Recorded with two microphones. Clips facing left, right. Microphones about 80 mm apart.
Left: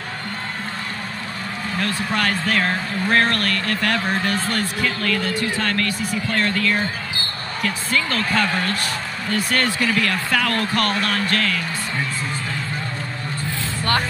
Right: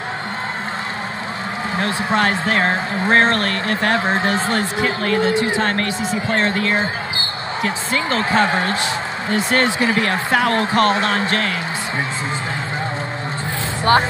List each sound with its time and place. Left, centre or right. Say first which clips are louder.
1.8 s speech: right 4 dB; right